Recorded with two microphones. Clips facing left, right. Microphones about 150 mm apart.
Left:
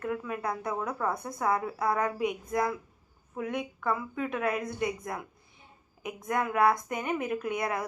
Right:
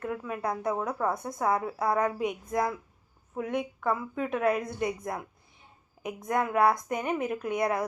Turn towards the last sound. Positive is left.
turn(degrees=-30)  # may be behind; listen again after turning